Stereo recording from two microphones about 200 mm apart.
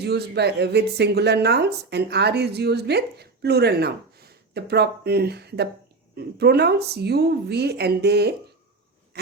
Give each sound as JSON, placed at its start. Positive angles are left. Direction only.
{"t": 0.0, "sound": "speech", "side_deg": -55}